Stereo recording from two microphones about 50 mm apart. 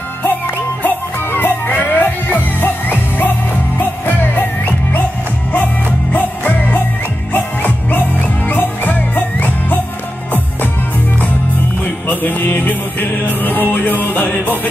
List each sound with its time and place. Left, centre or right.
0.8 s music: left
12.1 s music: left